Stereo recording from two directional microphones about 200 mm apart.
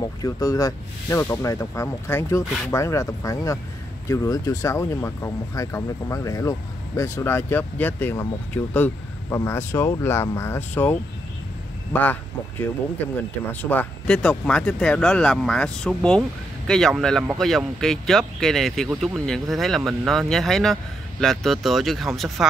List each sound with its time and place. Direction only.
0.0 s speech: 15° left (ahead or behind); by 22.5 s centre (ahead or behind)